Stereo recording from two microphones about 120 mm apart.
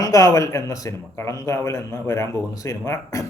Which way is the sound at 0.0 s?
25° left (ahead or behind).